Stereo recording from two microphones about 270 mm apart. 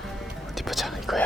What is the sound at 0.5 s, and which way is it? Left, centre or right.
Whispering, centre.